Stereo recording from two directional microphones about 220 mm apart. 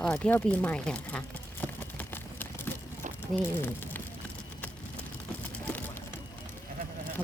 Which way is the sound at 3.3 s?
10° left (ahead or behind).